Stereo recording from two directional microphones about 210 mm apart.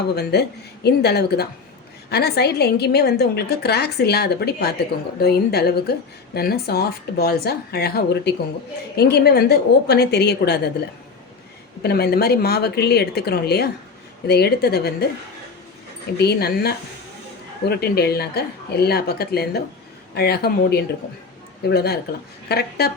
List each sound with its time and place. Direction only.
0.1 s speech: 50° left (ahead or behind)
11.8 s speech: 50° left (ahead or behind)
16.1 s speech: 50° left (ahead or behind)